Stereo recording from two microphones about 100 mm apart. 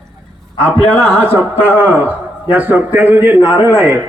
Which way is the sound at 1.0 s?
20° right (ahead or behind).